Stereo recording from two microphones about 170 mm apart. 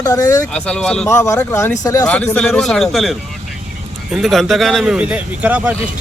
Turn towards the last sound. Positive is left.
turn(degrees=-10)  # may be behind; listen again after turning